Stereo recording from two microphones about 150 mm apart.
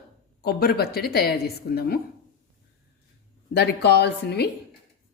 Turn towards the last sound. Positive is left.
turn(degrees=90)